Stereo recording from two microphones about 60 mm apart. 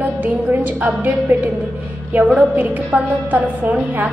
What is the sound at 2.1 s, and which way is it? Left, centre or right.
A woman's voice, right.